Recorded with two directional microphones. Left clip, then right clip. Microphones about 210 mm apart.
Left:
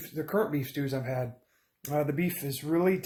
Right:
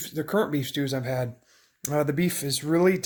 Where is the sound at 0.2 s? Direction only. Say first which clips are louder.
Right 3 dB; 35° right (ahead or behind).